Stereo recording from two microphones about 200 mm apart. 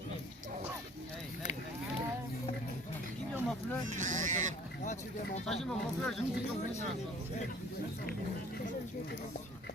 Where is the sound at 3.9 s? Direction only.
40° right (ahead or behind).